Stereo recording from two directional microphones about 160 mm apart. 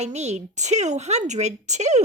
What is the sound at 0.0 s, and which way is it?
Speech, 45° right (ahead or behind).